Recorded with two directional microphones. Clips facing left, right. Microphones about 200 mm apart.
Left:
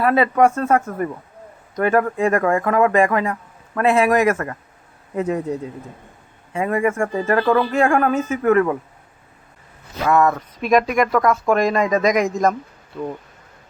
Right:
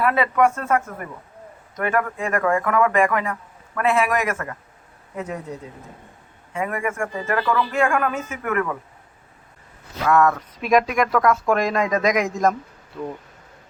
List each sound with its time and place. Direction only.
0.0 s speech: 35° left (ahead or behind)
6.5 s speech: 25° left (ahead or behind)
10.0 s speech: 10° left (ahead or behind)
10.6 s speech: 5° right (ahead or behind)